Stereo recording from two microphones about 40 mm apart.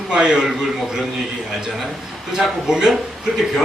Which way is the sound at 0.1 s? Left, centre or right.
Centre.